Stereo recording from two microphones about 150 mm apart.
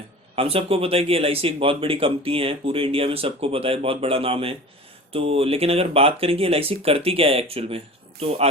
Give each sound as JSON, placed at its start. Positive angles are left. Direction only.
{"t": 0.3, "sound": "speech", "side_deg": -40}